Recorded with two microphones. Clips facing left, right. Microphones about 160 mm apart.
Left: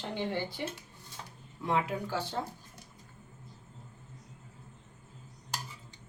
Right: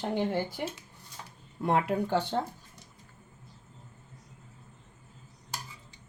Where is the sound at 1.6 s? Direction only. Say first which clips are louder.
Right 4 dB; 60° right (ahead or behind).